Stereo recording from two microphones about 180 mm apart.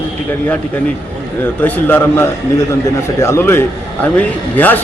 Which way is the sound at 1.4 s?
10° left (ahead or behind).